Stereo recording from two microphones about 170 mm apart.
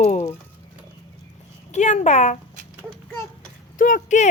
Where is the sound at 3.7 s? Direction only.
50° left (ahead or behind).